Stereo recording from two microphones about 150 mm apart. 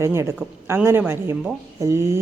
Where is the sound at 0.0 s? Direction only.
20° right (ahead or behind).